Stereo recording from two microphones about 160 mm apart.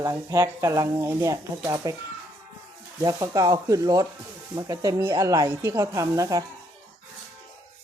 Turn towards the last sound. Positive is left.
turn(degrees=-20)  # may be behind; listen again after turning